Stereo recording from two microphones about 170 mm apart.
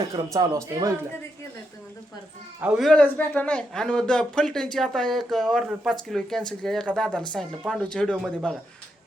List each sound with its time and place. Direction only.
0.3 s speech: 20° right (ahead or behind)
2.6 s a man's voice: 5° right (ahead or behind)